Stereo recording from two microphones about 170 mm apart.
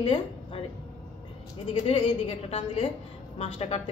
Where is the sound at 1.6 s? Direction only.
30° left (ahead or behind).